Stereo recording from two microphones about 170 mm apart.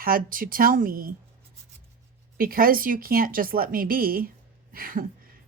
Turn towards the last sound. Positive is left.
turn(degrees=-60)  # may be behind; listen again after turning